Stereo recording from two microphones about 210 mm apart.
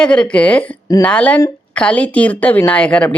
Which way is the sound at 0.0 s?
5° left (ahead or behind).